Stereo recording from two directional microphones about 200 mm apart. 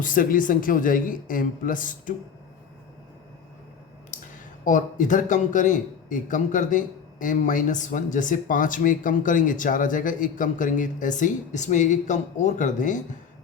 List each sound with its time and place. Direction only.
0.0 s speech: 45° left (ahead or behind)
4.6 s a man's voice: 40° left (ahead or behind)